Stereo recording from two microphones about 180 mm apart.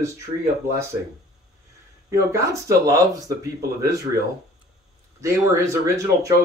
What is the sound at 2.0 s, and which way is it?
Speech, 15° right (ahead or behind).